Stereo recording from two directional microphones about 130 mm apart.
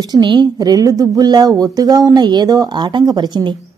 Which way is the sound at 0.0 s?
35° right (ahead or behind).